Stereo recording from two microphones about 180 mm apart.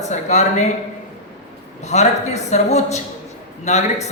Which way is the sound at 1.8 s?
40° left (ahead or behind).